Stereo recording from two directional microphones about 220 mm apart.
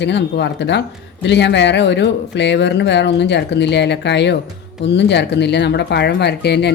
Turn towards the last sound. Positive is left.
turn(degrees=50)  # may be behind; listen again after turning